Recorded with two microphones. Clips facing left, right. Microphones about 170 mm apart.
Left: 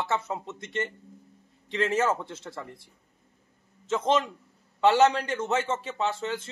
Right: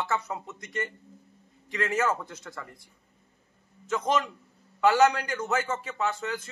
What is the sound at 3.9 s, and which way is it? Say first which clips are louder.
A man's voice: left 2 dB; 25° left (ahead or behind).